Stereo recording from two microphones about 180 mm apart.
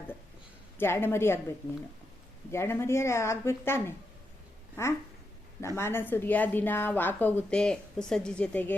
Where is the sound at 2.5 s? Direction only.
15° left (ahead or behind).